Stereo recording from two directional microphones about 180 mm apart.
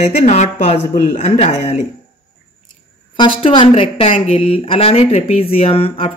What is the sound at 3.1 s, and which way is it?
Speech, 30° left (ahead or behind).